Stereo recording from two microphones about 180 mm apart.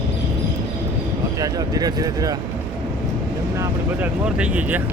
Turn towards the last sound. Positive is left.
turn(degrees=-10)  # may be behind; listen again after turning